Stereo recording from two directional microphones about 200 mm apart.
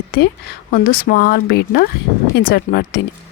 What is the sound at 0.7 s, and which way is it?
Speech, 45° left (ahead or behind).